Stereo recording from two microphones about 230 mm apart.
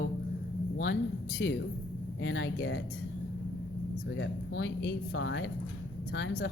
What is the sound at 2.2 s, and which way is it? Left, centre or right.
Speech, left.